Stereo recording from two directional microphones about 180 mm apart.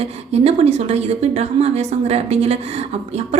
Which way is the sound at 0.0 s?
35° right (ahead or behind).